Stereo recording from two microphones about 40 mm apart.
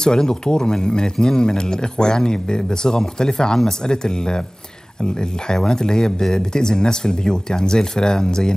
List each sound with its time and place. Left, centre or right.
0.0 s speech: centre